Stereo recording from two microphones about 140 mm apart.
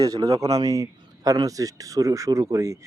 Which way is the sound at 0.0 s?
25° right (ahead or behind).